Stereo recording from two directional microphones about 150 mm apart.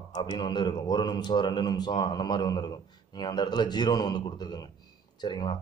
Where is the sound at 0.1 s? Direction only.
30° left (ahead or behind).